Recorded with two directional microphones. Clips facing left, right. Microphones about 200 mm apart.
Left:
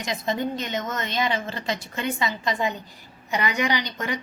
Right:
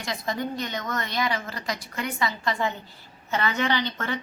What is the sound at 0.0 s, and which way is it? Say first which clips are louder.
A woman's voice: left 3 dB; 20° left (ahead or behind).